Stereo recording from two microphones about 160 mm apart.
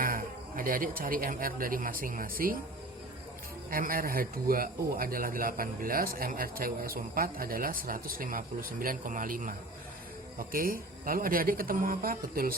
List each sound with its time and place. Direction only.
0.0 s speech: 60° right (ahead or behind)
3.7 s speech: 60° right (ahead or behind)